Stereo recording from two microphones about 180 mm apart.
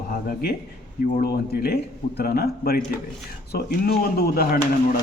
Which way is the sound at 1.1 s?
60° left (ahead or behind).